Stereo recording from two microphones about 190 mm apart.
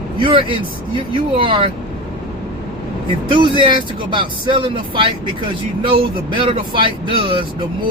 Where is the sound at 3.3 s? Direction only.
25° right (ahead or behind).